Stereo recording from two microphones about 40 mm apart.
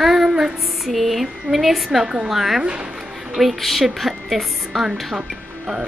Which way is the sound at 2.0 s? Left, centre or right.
Right.